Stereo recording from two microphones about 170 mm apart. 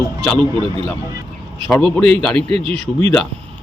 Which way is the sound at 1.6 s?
Centre (ahead or behind).